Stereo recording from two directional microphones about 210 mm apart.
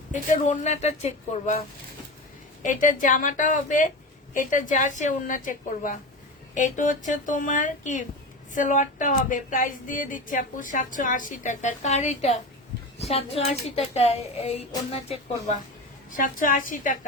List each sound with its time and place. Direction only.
0.1 s speech: 35° left (ahead or behind)
2.6 s speech: 40° left (ahead or behind)
16.1 s speech: 40° left (ahead or behind)